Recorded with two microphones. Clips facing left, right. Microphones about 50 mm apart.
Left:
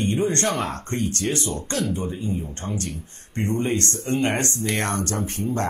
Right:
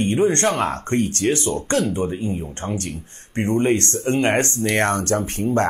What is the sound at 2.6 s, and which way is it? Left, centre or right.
Speech, right.